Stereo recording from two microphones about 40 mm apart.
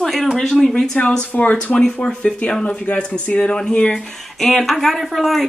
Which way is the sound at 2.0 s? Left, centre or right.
Left.